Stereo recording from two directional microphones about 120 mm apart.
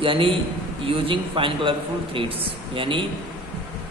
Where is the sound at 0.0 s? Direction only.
45° right (ahead or behind).